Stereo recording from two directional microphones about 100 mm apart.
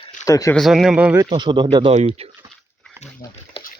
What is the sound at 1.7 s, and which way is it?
Speech, 75° right (ahead or behind).